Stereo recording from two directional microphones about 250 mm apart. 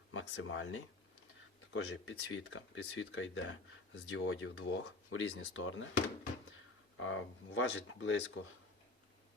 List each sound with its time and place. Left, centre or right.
0.1 s speech: left
6.9 s speech: left